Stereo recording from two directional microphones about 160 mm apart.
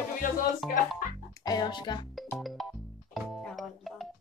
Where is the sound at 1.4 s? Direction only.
25° left (ahead or behind).